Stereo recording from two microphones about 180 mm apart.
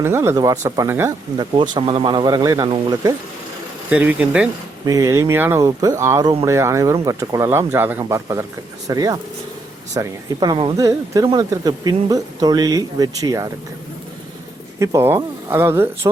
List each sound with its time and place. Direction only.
0.0 s speech: 15° right (ahead or behind)
1.4 s speech: 25° right (ahead or behind)
3.8 s speech: 5° right (ahead or behind)
4.9 s speech: 20° right (ahead or behind)
14.8 s speech: 15° right (ahead or behind)